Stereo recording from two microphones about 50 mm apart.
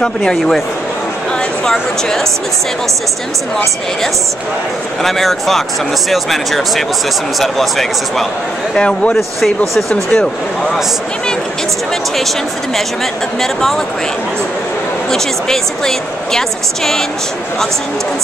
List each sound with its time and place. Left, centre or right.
0.0 s a woman's voice: centre
1.6 s a woman's voice: centre
5.0 s speech: centre
8.7 s a man's voice: left
9.8 s a woman's voice: centre
12.2 s speech: centre
15.0 s a woman's voice: centre